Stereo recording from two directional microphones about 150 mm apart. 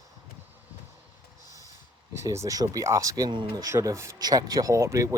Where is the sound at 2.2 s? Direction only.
20° right (ahead or behind).